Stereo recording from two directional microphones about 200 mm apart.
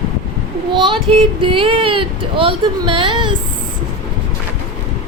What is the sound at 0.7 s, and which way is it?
Speech, 25° right (ahead or behind).